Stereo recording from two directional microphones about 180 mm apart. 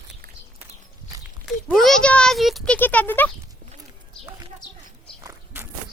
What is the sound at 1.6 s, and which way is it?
Speech, centre (ahead or behind).